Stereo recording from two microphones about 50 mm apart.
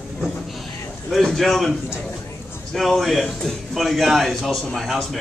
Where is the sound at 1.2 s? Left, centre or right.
Centre.